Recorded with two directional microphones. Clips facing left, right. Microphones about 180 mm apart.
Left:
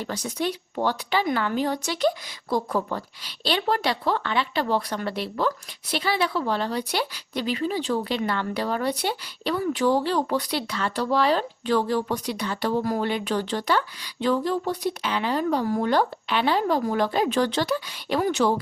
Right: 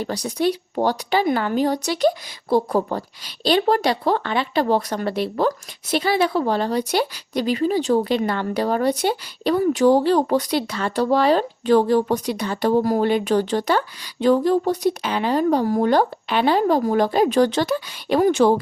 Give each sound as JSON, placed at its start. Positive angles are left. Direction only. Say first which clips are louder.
{"t": 0.0, "sound": "a woman's voice", "louder": "right 6 dB", "side_deg": -35}